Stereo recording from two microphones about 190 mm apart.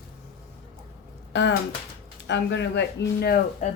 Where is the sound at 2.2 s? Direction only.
65° left (ahead or behind); by 3.7 s 50° left (ahead or behind).